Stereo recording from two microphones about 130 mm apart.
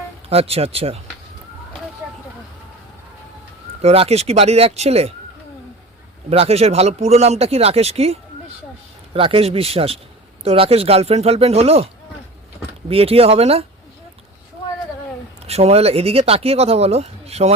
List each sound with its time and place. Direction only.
0.3 s speech: 50° right (ahead or behind)
3.8 s speech: 50° right (ahead or behind)
6.3 s speech: 50° right (ahead or behind)
12.9 s speech: 50° right (ahead or behind)
15.4 s speech: 55° right (ahead or behind)